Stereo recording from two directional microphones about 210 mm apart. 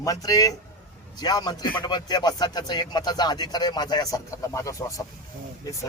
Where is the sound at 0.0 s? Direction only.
15° left (ahead or behind).